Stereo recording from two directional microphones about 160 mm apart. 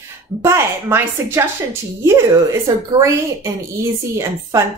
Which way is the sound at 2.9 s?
20° right (ahead or behind).